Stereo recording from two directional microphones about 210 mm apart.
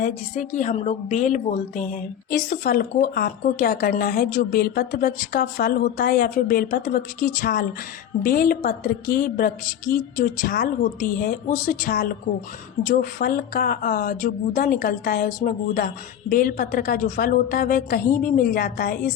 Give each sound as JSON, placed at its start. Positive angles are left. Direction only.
{"t": 0.0, "sound": "a woman's voice", "side_deg": 35}